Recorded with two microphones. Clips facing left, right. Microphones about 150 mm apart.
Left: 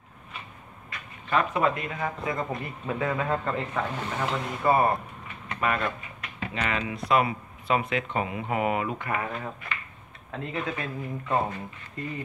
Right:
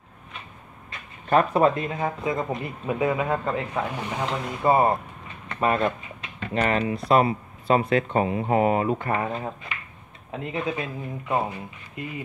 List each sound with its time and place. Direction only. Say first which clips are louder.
1.3 s speech: right 5 dB; 40° right (ahead or behind); by 4.9 s 20° right (ahead or behind)
5.6 s a sound: right 5 dB; 30° right (ahead or behind)
6.5 s speech: right 7 dB; 40° right (ahead or behind); by 12.0 s 10° right (ahead or behind)